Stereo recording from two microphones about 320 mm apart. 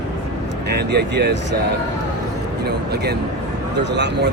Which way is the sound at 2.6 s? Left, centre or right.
Right.